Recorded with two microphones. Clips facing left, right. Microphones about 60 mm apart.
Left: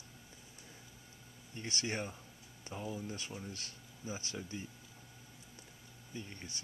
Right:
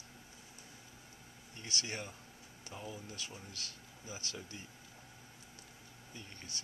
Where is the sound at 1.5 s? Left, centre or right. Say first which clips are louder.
Left 3 dB; left.